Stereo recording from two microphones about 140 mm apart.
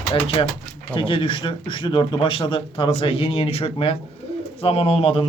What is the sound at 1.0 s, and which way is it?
Speech, 35° left (ahead or behind).